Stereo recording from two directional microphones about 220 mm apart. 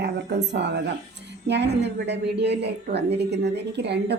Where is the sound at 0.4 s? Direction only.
50° right (ahead or behind).